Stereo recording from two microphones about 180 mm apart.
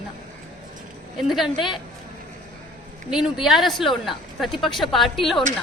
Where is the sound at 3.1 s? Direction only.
Centre (ahead or behind).